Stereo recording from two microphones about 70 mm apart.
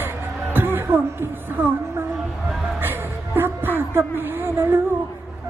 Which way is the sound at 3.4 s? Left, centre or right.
Right.